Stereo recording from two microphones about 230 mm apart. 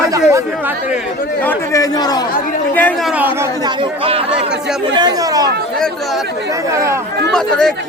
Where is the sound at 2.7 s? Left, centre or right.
Centre.